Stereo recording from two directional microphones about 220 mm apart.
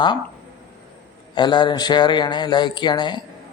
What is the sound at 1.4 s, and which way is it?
Speech, 20° left (ahead or behind).